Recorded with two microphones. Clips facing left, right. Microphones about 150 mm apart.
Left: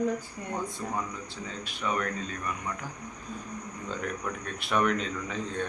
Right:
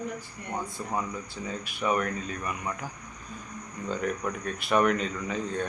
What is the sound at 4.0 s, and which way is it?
Speech, 5° right (ahead or behind).